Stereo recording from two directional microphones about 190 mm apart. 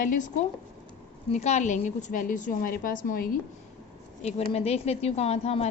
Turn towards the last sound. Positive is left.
turn(degrees=35)  # may be behind; listen again after turning